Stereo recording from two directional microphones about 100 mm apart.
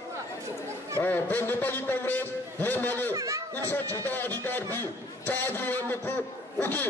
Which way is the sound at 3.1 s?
35° right (ahead or behind).